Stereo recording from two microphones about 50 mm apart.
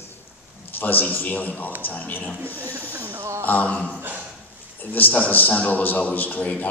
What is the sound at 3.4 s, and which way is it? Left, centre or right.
Speech, left.